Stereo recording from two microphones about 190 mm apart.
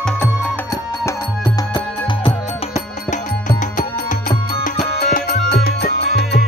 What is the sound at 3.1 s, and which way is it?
Music, 40° left (ahead or behind).